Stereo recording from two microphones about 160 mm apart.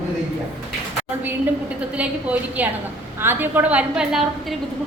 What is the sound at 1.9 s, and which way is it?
A woman's voice, 10° right (ahead or behind).